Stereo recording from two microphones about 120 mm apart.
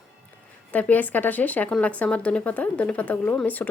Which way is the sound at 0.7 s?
15° left (ahead or behind).